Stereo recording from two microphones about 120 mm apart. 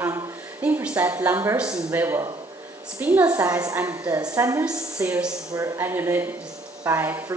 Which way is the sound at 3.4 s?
25° right (ahead or behind).